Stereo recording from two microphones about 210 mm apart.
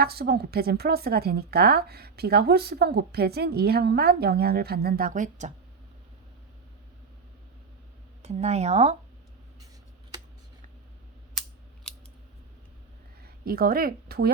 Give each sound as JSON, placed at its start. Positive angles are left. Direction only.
{"t": 0.0, "sound": "a woman's voice", "side_deg": -50}
{"t": 8.2, "sound": "speech", "side_deg": -30}
{"t": 11.3, "sound": "scissors", "side_deg": 5}
{"t": 13.2, "sound": "a woman's voice", "side_deg": -45}